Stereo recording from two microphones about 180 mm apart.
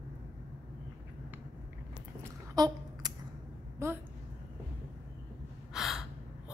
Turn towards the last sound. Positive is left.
turn(degrees=0)  # may be behind; listen again after turning